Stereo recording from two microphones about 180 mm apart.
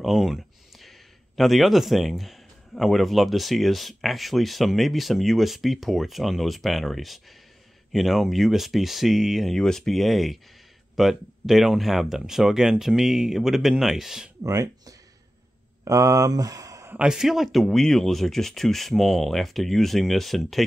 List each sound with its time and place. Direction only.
0.0 s speech: centre (ahead or behind)
14.4 s speech: 20° right (ahead or behind); by 20.6 s centre (ahead or behind)